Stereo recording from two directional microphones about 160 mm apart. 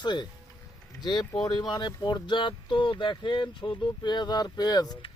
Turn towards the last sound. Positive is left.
turn(degrees=25)  # may be behind; listen again after turning